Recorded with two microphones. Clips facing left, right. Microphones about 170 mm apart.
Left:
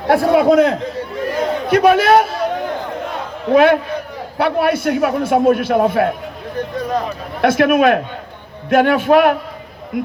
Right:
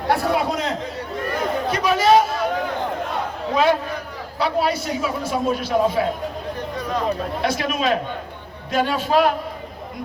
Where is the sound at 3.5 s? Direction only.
60° left (ahead or behind).